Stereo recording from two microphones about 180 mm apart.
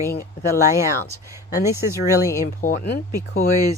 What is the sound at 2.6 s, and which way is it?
Speech, 50° left (ahead or behind).